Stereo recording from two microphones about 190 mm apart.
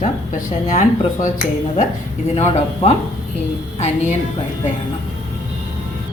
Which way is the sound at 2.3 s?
35° left (ahead or behind).